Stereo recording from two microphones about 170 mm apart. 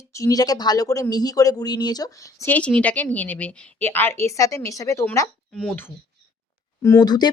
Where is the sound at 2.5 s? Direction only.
10° left (ahead or behind).